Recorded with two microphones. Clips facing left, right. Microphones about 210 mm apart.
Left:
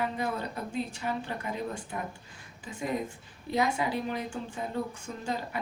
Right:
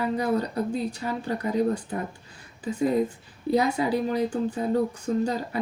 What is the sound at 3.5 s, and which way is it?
Speech, 40° right (ahead or behind).